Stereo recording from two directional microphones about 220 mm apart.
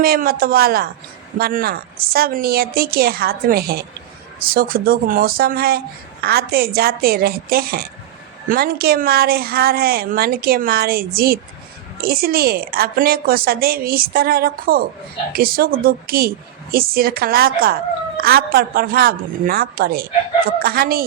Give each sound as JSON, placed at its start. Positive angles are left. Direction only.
{"t": 0.0, "sound": "speech", "side_deg": -40}